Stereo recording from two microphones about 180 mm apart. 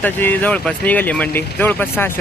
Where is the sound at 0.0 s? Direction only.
10° left (ahead or behind).